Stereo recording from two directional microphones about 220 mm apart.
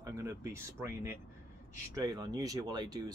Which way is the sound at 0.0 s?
15° right (ahead or behind).